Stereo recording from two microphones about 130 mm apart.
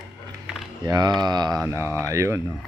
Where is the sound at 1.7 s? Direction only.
20° right (ahead or behind).